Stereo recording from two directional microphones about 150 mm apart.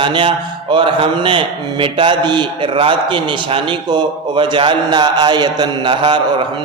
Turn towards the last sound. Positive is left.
turn(degrees=-35)  # may be behind; listen again after turning